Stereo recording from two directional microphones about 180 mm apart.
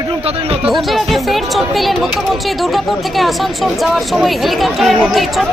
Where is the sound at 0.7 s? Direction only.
Centre (ahead or behind).